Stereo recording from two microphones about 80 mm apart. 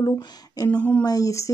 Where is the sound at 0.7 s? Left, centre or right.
Centre.